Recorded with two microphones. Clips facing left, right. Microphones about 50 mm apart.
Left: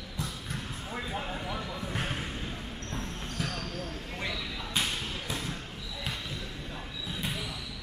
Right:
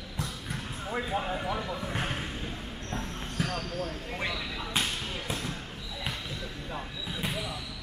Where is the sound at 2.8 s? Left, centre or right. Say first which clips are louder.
Right 3 dB; centre.